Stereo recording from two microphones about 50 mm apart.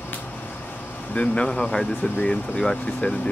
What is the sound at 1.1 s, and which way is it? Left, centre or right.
Speech, left.